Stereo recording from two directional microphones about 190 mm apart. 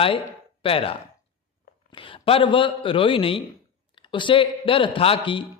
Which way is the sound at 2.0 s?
25° left (ahead or behind).